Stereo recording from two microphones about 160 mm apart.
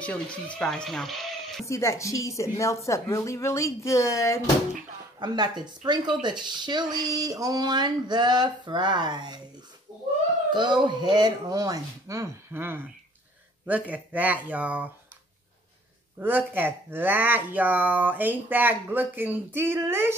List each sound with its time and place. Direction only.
0.0 s speech: 10° left (ahead or behind)
1.7 s a woman's voice: 20° left (ahead or behind)
5.2 s speech: 25° right (ahead or behind)
10.5 s speech: 30° right (ahead or behind); by 14.9 s 10° right (ahead or behind)
16.2 s speech: 10° right (ahead or behind)